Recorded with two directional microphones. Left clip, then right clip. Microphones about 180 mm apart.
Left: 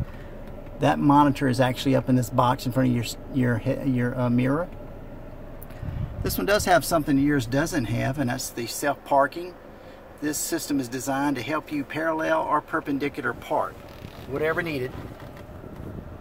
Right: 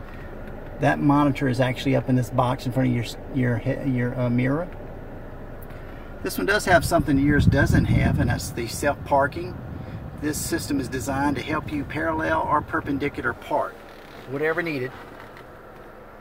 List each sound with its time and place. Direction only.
0.7 s speech: 20° left (ahead or behind)
6.2 s speech: 15° left (ahead or behind)